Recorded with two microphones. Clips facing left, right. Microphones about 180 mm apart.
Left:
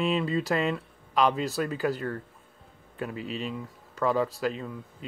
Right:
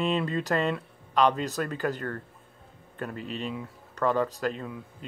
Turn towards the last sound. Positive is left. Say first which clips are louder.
# left 1 dB
turn(degrees=0)  # may be behind; listen again after turning